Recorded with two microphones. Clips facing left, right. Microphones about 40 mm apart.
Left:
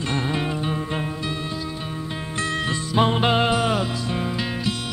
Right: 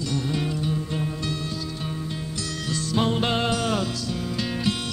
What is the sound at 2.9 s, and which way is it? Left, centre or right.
Music, left.